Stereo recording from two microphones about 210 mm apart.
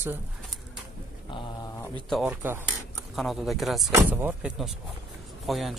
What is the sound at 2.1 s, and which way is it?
Speech, 5° right (ahead or behind).